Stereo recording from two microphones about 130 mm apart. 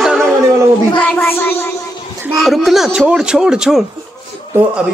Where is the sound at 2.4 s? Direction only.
Centre (ahead or behind).